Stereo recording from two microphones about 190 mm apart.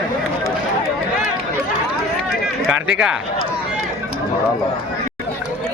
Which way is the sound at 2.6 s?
5° right (ahead or behind).